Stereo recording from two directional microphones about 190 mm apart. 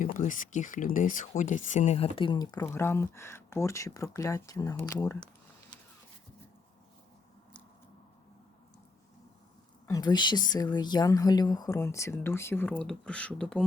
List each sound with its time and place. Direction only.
0.0 s speech: 45° left (ahead or behind); by 5.3 s 15° left (ahead or behind)
5.7 s a sound: 20° left (ahead or behind)
9.8 s speech: 20° left (ahead or behind)